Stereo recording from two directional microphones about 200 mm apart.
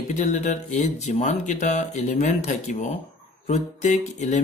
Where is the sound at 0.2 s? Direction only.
35° left (ahead or behind).